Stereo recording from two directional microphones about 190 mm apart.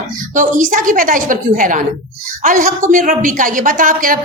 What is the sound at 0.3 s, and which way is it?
A woman's voice, 40° right (ahead or behind).